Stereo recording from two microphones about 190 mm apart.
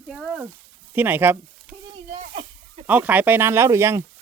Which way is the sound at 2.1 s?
35° right (ahead or behind).